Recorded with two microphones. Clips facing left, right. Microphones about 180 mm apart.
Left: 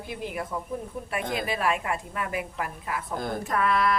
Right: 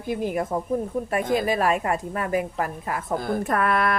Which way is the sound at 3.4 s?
55° right (ahead or behind).